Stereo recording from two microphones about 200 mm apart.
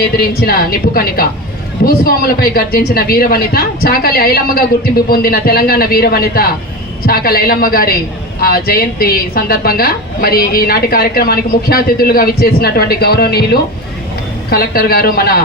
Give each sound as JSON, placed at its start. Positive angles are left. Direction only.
{"t": 0.2, "sound": "a woman's voice", "side_deg": 50}